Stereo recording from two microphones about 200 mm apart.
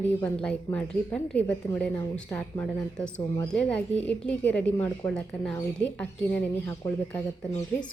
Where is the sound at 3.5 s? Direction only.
5° left (ahead or behind).